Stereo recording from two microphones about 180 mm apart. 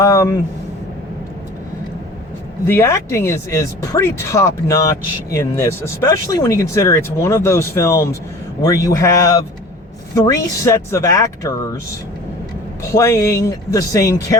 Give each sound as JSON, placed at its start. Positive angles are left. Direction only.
{"t": 0.0, "sound": "speech", "side_deg": 15}
{"t": 2.6, "sound": "speech", "side_deg": 15}
{"t": 12.9, "sound": "speech", "side_deg": 15}